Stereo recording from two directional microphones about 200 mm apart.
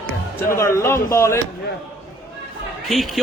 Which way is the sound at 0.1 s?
15° left (ahead or behind).